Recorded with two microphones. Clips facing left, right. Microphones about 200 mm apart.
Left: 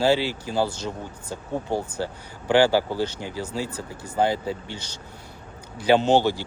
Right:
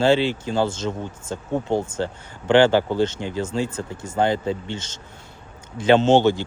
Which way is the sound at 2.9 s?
20° right (ahead or behind).